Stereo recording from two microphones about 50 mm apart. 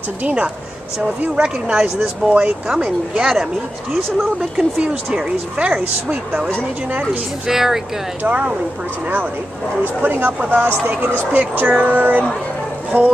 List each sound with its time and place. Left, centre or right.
0.2 s a woman's voice: right
3.2 s speech: centre
4.8 s a woman's voice: centre
7.4 s speech: centre
8.3 s a woman's voice: right
10.0 s speech: right